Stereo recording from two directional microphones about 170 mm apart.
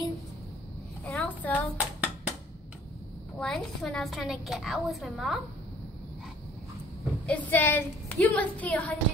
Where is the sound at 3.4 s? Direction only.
Centre (ahead or behind).